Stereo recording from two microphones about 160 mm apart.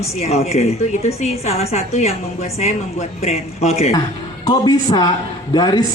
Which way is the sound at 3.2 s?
40° left (ahead or behind).